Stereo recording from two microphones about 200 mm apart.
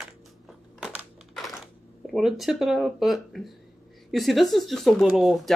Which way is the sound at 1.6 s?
Centre (ahead or behind).